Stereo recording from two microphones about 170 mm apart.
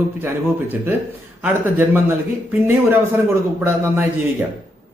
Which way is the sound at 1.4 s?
10° right (ahead or behind).